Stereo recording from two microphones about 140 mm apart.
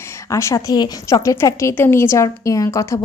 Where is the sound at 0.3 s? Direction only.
20° left (ahead or behind).